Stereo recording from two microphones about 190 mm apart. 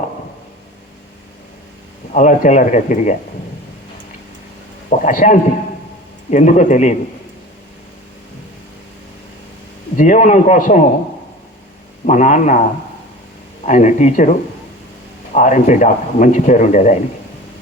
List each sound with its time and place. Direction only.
2.1 s speech: 40° left (ahead or behind)
4.9 s speech: 40° left (ahead or behind)
10.0 s speech: 40° left (ahead or behind)
12.0 s speech: 40° left (ahead or behind)
13.7 s speech: 40° left (ahead or behind)
15.3 s speech: 40° left (ahead or behind)